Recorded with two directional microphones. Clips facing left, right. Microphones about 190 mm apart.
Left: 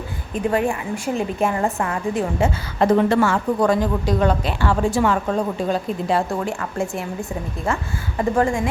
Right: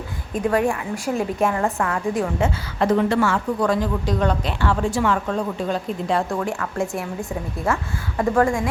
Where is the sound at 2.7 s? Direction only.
45° left (ahead or behind).